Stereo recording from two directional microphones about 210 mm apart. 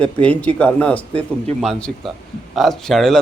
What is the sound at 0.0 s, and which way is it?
A man's voice, 5° left (ahead or behind).